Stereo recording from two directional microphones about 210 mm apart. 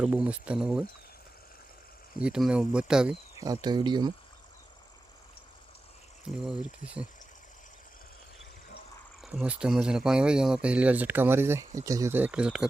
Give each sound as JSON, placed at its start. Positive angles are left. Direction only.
{"t": 0.0, "sound": "speech", "side_deg": -5}
{"t": 2.1, "sound": "speech", "side_deg": -5}
{"t": 3.4, "sound": "speech", "side_deg": -20}
{"t": 6.2, "sound": "speech", "side_deg": -5}
{"t": 9.2, "sound": "speech", "side_deg": -5}